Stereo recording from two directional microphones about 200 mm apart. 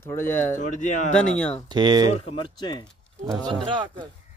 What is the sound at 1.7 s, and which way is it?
Speech, 20° right (ahead or behind).